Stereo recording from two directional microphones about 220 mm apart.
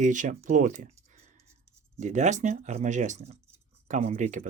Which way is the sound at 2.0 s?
35° right (ahead or behind).